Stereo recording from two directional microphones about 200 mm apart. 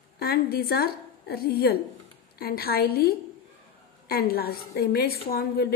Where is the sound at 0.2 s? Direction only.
50° left (ahead or behind).